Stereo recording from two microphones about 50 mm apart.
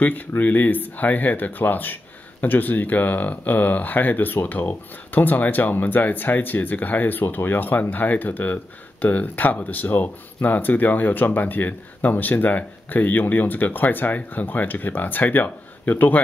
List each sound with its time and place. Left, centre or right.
0.4 s speech: left